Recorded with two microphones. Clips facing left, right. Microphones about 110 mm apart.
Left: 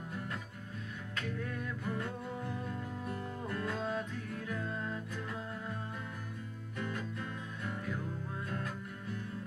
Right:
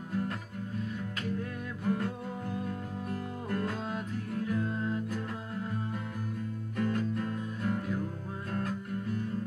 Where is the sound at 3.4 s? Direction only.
40° right (ahead or behind).